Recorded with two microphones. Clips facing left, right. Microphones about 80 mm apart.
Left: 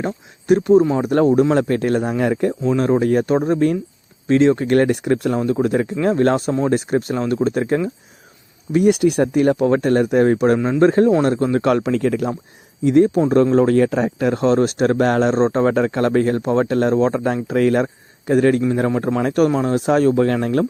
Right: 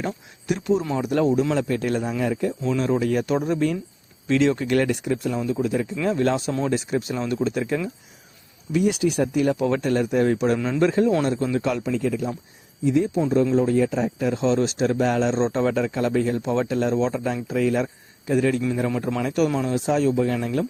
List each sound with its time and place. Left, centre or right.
0.0 s speech: left
10.6 s speech: left
12.8 s speech: left